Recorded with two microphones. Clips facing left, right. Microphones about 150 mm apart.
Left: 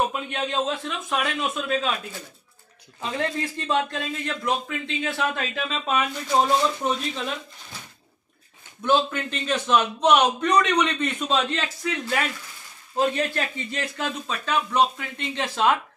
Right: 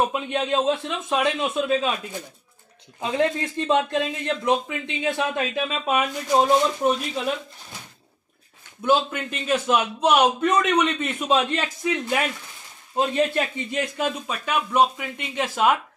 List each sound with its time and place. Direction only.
0.1 s speech: 25° right (ahead or behind)
3.0 s a man's voice: 20° right (ahead or behind)
8.8 s a man's voice: 10° right (ahead or behind)